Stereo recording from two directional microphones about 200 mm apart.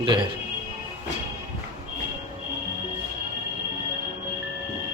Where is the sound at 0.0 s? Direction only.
25° right (ahead or behind).